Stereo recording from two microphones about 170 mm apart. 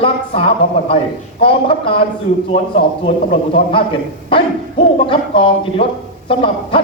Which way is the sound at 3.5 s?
30° left (ahead or behind).